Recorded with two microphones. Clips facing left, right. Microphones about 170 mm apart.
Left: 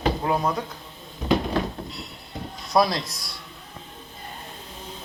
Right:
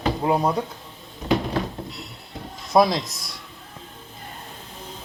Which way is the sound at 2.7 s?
20° right (ahead or behind).